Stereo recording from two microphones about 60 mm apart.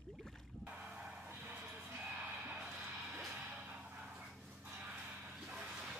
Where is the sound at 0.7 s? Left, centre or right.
Centre.